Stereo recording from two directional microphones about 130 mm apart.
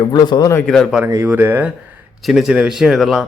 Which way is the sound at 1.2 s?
15° right (ahead or behind).